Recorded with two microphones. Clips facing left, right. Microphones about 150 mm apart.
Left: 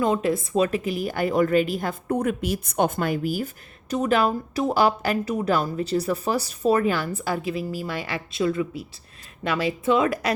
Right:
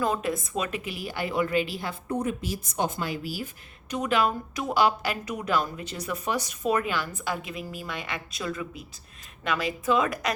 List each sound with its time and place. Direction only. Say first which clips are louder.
0.0 s a woman's voice: left 5 dB; 25° left (ahead or behind)